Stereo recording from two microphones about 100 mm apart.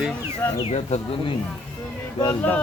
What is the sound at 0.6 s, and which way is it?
Speech, 90° left.